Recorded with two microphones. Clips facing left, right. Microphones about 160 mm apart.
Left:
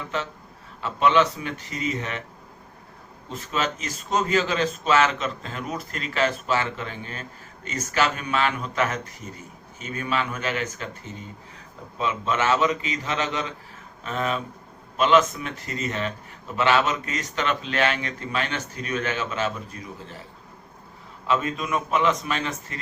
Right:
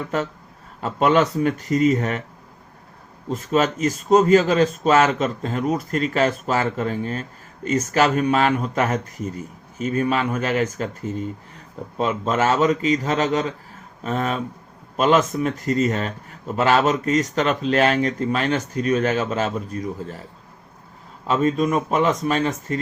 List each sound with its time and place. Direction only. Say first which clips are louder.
0.8 s speech: right 3 dB; 45° right (ahead or behind)
3.2 s speech: right 8 dB; 45° right (ahead or behind)
21.2 s speech: right 6 dB; 40° right (ahead or behind)